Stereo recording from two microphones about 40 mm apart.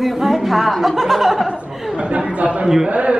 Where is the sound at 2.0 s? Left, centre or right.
Right.